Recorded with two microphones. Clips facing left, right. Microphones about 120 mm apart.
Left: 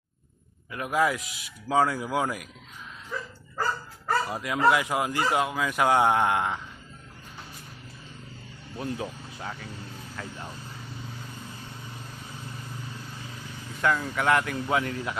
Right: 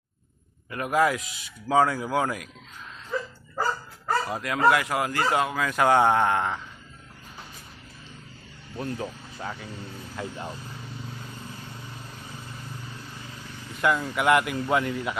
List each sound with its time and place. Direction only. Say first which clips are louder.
0.7 s speech: right 2 dB; centre (ahead or behind)
3.6 s dog: right 2 dB; centre (ahead or behind)
4.7 s speech: right 1 dB; 15° left (ahead or behind)
8.7 s speech: right 1 dB; 5° left (ahead or behind)
10.2 s speech: right 5 dB; 15° right (ahead or behind)
13.8 s speech: right 2 dB; 5° right (ahead or behind)